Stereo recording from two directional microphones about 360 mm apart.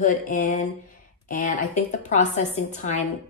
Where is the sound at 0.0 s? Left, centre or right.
Left.